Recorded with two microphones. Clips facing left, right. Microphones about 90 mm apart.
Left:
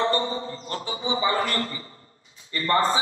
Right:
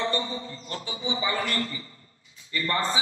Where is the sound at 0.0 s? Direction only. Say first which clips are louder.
Left 5 dB; 35° left (ahead or behind).